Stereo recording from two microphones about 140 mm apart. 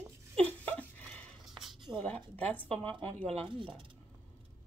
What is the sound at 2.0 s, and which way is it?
A woman's voice, 10° left (ahead or behind).